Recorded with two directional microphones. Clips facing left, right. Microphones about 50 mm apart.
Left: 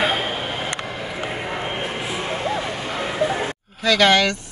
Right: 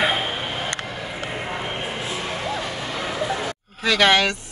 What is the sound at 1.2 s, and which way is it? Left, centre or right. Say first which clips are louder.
Vehicle: left 2 dB; centre.